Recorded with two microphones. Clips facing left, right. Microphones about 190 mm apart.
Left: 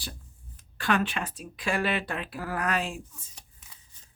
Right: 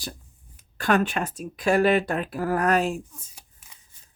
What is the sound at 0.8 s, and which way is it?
Speech, 45° right (ahead or behind).